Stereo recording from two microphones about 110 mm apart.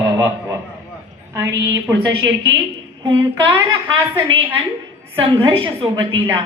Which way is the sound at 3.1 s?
35° right (ahead or behind).